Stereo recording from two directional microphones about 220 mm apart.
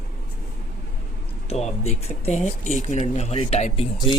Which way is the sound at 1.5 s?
30° left (ahead or behind).